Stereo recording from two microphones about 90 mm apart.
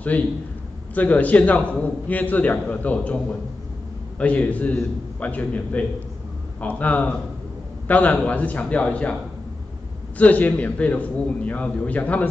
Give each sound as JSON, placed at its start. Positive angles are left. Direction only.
{"t": 0.1, "sound": "a man's voice", "side_deg": 20}
{"t": 10.1, "sound": "a man's voice", "side_deg": 15}